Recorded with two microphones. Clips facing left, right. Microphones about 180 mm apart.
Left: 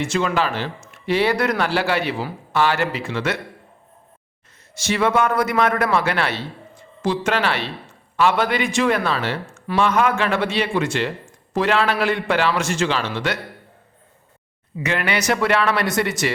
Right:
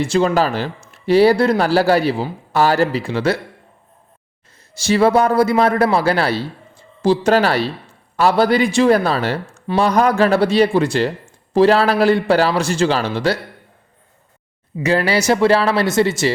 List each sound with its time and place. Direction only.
0.0 s a man's voice: 35° right (ahead or behind)
4.7 s a man's voice: 35° right (ahead or behind)
14.8 s a man's voice: 35° right (ahead or behind)